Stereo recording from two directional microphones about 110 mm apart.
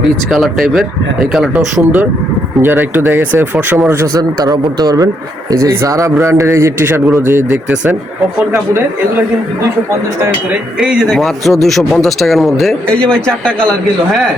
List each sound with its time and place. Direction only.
0.3 s a man's voice: centre (ahead or behind)
2.6 s speech: 20° right (ahead or behind)
10.8 s a man's voice: centre (ahead or behind)